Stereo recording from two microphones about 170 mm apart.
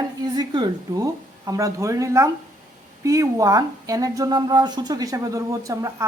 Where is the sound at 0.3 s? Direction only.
25° right (ahead or behind).